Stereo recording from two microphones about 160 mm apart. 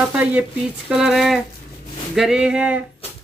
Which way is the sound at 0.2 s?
10° right (ahead or behind).